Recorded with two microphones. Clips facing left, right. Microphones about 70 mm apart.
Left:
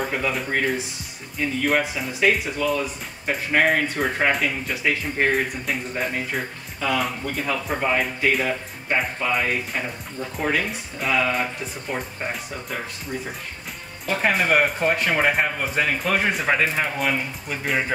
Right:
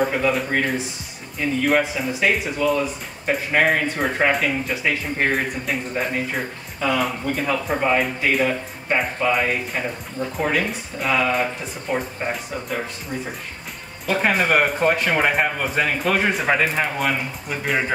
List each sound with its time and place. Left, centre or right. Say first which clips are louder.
0.0 s speech: right 5 dB; centre
14.1 s speech: right 1 dB; centre